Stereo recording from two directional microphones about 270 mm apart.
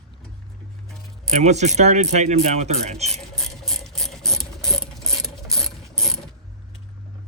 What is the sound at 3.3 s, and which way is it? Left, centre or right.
Ratchet, centre.